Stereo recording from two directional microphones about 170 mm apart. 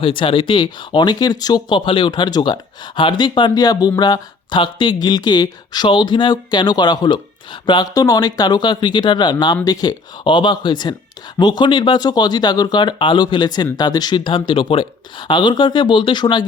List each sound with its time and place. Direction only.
0.0 s speech: 30° left (ahead or behind)